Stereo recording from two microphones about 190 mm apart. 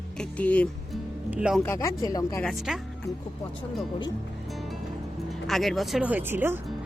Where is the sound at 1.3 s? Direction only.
5° right (ahead or behind).